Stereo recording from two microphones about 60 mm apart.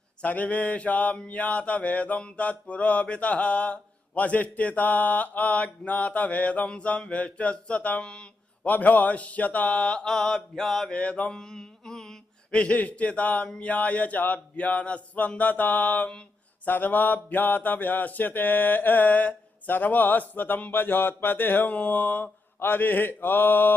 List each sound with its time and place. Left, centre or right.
0.2 s mantra: left
8.7 s mantra: left; by 10.4 s centre
10.6 s a sound: centre
10.9 s mantra: centre
12.5 s mantra: left
16.6 s a sound: left